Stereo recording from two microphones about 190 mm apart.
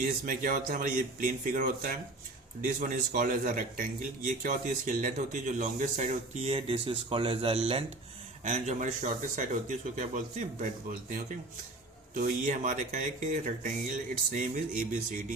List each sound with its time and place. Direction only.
0.0 s a man's voice: 45° right (ahead or behind)
12.1 s a man's voice: 45° right (ahead or behind)